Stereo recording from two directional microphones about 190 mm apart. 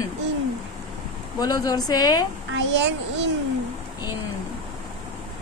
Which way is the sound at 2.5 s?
70° right (ahead or behind).